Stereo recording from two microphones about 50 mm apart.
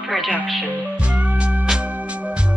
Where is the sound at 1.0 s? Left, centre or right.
Right.